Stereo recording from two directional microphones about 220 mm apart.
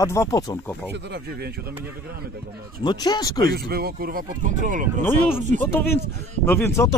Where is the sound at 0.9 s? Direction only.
50° right (ahead or behind).